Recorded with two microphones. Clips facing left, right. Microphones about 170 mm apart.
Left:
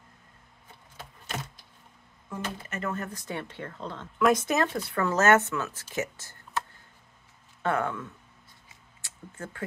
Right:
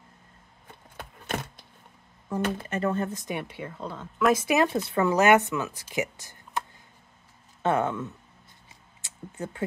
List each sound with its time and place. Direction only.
0.9 s a sound: 55° right (ahead or behind)
2.7 s speech: 30° right (ahead or behind)
7.6 s speech: 20° right (ahead or behind)